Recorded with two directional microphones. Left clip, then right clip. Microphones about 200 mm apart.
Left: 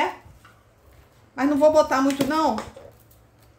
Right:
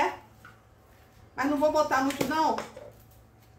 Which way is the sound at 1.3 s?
50° left (ahead or behind).